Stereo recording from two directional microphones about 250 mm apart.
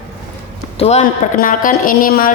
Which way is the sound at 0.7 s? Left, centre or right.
Left.